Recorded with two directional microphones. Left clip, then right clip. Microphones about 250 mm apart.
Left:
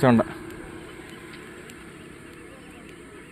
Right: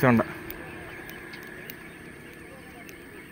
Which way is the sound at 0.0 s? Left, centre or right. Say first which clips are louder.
Left 2 dB; centre.